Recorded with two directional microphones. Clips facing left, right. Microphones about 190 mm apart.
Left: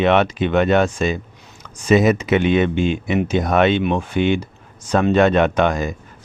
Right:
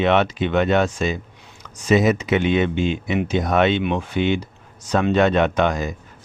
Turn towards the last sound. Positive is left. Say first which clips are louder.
# left 2 dB
turn(degrees=55)  # may be behind; listen again after turning